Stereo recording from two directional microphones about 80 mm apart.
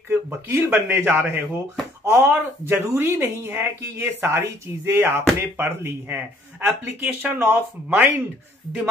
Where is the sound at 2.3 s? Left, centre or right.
Right.